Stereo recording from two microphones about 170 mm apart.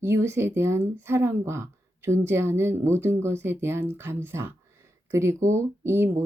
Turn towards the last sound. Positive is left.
turn(degrees=-15)  # may be behind; listen again after turning